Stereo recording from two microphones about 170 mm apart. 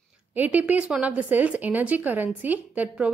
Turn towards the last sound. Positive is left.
turn(degrees=-10)  # may be behind; listen again after turning